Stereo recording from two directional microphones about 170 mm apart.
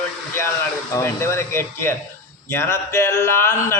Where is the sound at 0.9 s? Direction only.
15° left (ahead or behind).